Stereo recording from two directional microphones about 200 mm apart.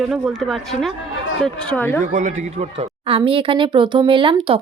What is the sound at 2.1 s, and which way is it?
A woman's voice, 40° right (ahead or behind).